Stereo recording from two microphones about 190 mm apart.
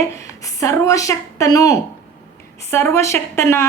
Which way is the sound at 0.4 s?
15° left (ahead or behind).